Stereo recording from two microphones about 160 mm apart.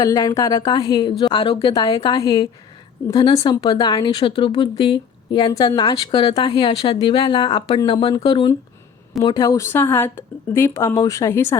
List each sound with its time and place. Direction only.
0.0 s a woman's voice: 25° left (ahead or behind)
9.2 s speech: 20° left (ahead or behind)